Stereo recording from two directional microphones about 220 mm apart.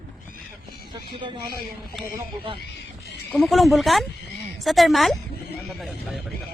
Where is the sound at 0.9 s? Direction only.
20° right (ahead or behind).